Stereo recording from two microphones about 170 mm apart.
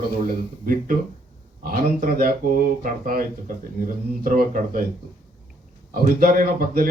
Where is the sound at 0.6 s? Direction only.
55° right (ahead or behind).